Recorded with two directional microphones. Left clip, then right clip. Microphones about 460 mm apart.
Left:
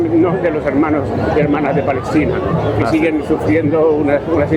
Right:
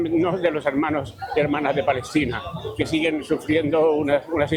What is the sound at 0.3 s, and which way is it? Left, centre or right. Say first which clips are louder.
A man's voice: left 6 dB; right.